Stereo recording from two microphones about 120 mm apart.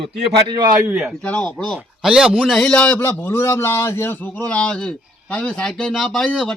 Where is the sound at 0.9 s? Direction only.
Centre (ahead or behind).